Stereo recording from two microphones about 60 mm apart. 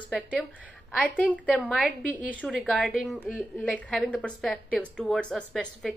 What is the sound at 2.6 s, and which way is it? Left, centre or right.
Speech, centre.